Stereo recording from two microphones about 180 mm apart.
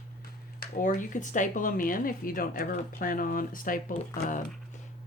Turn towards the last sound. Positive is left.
turn(degrees=50)  # may be behind; listen again after turning